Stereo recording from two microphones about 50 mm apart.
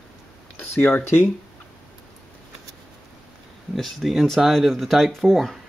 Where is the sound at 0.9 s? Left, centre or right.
Left.